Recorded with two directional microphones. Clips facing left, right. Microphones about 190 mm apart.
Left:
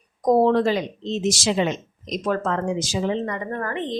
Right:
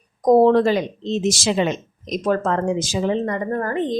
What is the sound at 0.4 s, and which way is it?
A woman's voice, 50° right (ahead or behind).